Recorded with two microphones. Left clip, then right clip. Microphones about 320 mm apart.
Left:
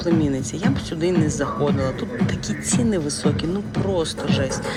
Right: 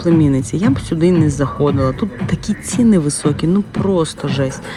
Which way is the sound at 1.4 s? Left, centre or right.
Right.